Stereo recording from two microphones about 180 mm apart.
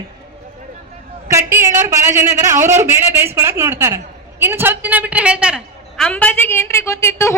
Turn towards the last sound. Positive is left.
turn(degrees=15)  # may be behind; listen again after turning